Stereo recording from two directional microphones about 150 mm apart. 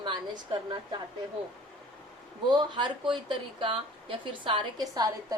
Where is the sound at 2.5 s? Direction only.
30° right (ahead or behind).